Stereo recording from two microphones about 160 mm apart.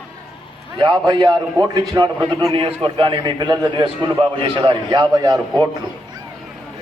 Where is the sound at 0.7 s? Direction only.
25° right (ahead or behind).